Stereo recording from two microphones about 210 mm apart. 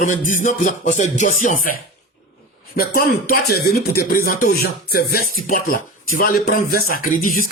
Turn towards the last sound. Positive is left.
turn(degrees=40)  # may be behind; listen again after turning